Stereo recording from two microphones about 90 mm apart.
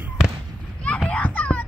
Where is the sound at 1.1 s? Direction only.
15° left (ahead or behind).